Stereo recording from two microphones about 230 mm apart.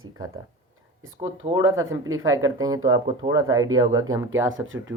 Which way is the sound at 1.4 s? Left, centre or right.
Right.